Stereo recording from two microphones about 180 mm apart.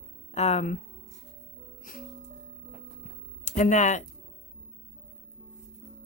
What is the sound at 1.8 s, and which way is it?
Music, 50° left (ahead or behind).